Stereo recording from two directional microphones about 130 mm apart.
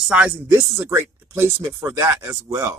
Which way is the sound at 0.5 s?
20° right (ahead or behind).